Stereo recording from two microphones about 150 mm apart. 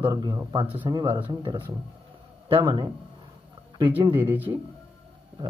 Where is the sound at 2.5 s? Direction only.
35° right (ahead or behind).